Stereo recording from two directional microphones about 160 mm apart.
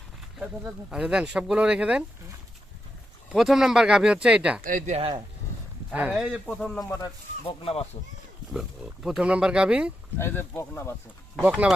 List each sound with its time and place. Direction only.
0.6 s speech: 5° right (ahead or behind)
3.3 s speech: centre (ahead or behind)
4.6 s speech: 60° right (ahead or behind)
4.9 s speech: 35° right (ahead or behind)
5.9 s speech: 10° right (ahead or behind)
7.0 s speech: 35° left (ahead or behind)
8.5 s speech: 5° right (ahead or behind)
10.2 s speech: 15° left (ahead or behind)
11.3 s speech: 10° right (ahead or behind)